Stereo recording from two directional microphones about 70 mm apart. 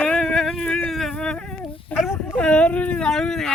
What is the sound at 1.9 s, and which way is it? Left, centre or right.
Speech, left.